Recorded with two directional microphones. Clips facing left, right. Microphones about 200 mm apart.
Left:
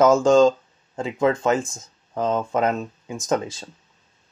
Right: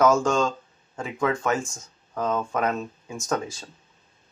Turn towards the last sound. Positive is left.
turn(degrees=25)  # may be behind; listen again after turning